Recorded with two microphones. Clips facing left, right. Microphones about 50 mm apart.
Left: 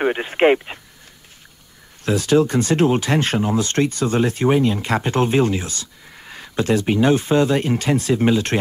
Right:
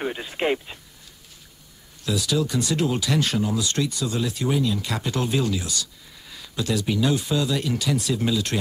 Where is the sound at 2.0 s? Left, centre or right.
Left.